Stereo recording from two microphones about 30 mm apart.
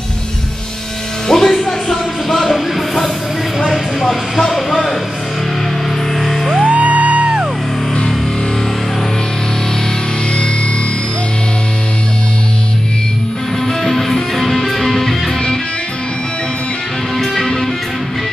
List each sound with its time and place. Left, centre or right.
1.3 s music: centre
2.2 s a sound: centre
6.2 s music: centre
6.6 s music: right
13.7 s music: centre